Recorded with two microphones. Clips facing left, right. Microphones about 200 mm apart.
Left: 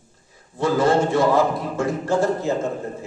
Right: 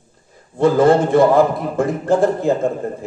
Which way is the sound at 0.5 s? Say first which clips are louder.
Right 6 dB; 55° right (ahead or behind).